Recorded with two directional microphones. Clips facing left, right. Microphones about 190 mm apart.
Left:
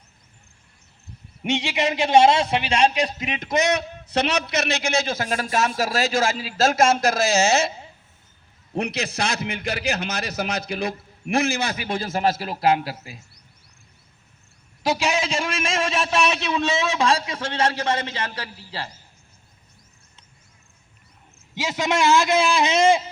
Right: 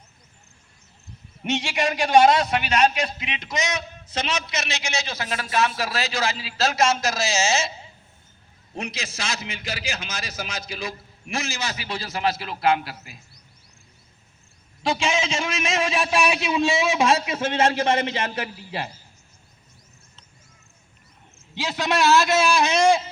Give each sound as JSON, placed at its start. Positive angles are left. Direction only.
{"t": 1.5, "sound": "a man's voice", "side_deg": 15}
{"t": 8.7, "sound": "a man's voice", "side_deg": 60}
{"t": 14.8, "sound": "a man's voice", "side_deg": 5}
{"t": 21.7, "sound": "a man's voice", "side_deg": 15}